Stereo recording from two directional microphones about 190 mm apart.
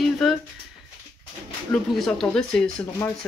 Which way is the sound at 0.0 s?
Centre (ahead or behind).